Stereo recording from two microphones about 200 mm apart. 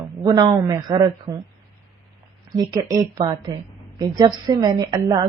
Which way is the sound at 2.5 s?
20° right (ahead or behind).